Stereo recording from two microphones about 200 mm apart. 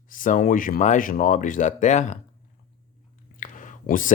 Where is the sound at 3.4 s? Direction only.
40° left (ahead or behind).